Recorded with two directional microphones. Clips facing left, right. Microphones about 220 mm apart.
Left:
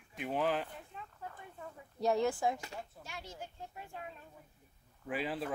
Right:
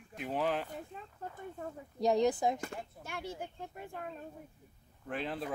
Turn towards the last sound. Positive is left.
turn(degrees=5)  # may be behind; listen again after turning